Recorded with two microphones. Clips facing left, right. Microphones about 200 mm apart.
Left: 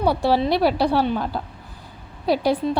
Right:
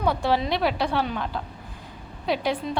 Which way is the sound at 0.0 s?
35° left (ahead or behind).